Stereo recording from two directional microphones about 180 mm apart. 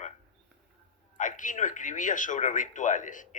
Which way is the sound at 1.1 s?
45° left (ahead or behind).